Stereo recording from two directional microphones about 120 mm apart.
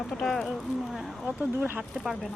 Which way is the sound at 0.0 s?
5° left (ahead or behind).